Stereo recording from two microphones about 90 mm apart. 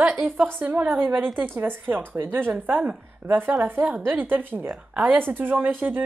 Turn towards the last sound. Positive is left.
turn(degrees=-20)  # may be behind; listen again after turning